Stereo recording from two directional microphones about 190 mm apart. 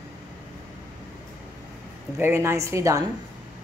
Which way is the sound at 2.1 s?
15° right (ahead or behind).